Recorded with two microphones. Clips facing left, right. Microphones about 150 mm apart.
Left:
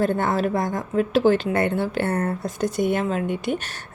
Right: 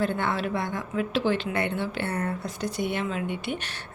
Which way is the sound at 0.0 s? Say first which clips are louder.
Left 5 dB; 45° left (ahead or behind).